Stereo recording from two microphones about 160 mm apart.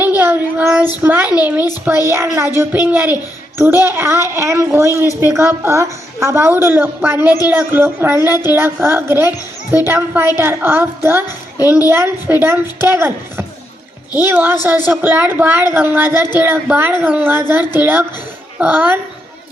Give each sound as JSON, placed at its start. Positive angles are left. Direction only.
{"t": 0.2, "sound": "a sound", "side_deg": -10}
{"t": 1.0, "sound": "a woman's voice", "side_deg": -10}
{"t": 11.5, "sound": "a child's voice", "side_deg": 20}
{"t": 11.9, "sound": "a woman's voice", "side_deg": -15}